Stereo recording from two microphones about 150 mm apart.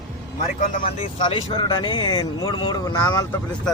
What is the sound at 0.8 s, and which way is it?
Speech, 40° left (ahead or behind).